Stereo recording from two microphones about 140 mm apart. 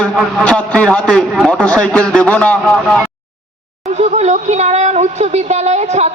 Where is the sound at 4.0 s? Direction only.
55° right (ahead or behind).